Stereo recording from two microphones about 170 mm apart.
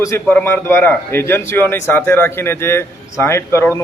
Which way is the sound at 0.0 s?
15° left (ahead or behind).